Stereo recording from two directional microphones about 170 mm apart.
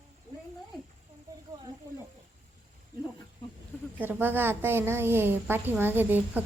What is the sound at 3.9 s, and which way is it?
A woman's voice, 10° right (ahead or behind).